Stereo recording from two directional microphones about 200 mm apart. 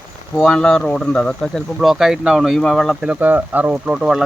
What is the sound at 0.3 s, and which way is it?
Speech, 5° left (ahead or behind).